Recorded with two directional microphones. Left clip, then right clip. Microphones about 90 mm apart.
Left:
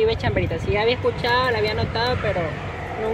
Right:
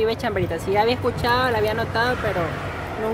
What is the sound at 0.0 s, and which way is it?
Speech, 60° right (ahead or behind).